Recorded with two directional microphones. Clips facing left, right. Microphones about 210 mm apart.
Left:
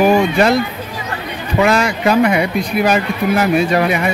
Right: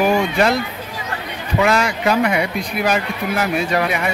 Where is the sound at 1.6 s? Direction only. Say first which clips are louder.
Left 3 dB; 40° left (ahead or behind).